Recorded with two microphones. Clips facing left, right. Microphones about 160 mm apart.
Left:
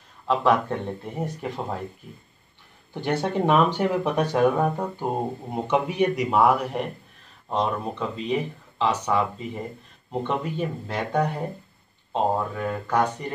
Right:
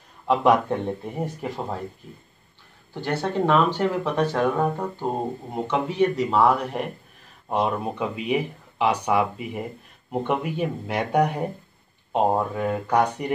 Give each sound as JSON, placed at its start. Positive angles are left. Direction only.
{"t": 0.3, "sound": "speech", "side_deg": -15}
{"t": 2.9, "sound": "speech", "side_deg": 20}
{"t": 7.4, "sound": "speech", "side_deg": -10}